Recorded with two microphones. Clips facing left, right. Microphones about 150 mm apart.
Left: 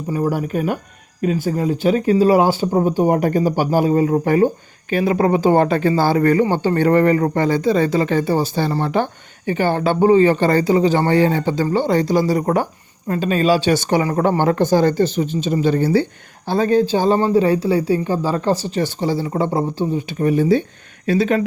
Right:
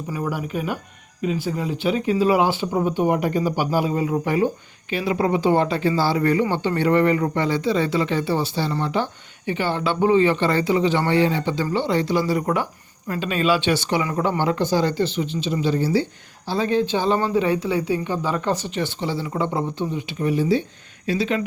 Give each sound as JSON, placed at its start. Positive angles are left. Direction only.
{"t": 0.3, "sound": "speech", "side_deg": 45}
{"t": 15.6, "sound": "speech", "side_deg": 55}
{"t": 16.5, "sound": "speech", "side_deg": 45}